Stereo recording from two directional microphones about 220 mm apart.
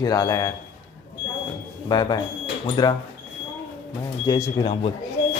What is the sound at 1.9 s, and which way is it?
Speech, 20° left (ahead or behind).